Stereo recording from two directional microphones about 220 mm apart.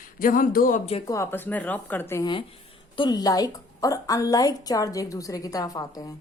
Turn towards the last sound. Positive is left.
turn(degrees=15)  # may be behind; listen again after turning